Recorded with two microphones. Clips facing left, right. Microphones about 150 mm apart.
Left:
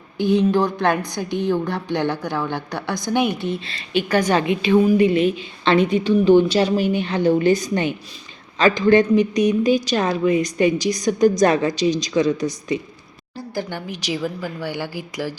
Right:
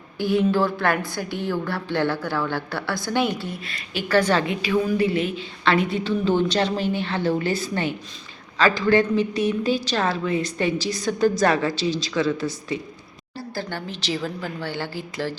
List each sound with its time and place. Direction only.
0.2 s a woman's voice: 20° left (ahead or behind)
4.1 s a woman's voice: 15° left (ahead or behind)